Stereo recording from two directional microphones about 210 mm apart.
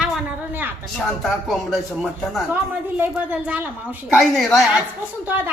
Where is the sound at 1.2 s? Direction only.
Centre (ahead or behind).